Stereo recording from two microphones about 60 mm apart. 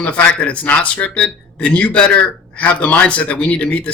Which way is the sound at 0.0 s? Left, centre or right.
Left.